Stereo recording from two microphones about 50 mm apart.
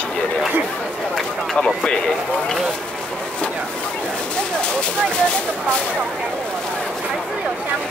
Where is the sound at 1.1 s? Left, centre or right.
Centre.